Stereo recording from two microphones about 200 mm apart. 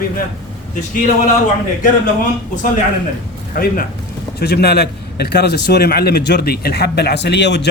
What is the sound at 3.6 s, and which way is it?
A man's voice, 50° left (ahead or behind).